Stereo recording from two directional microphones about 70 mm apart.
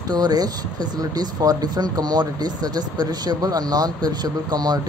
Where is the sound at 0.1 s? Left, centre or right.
Right.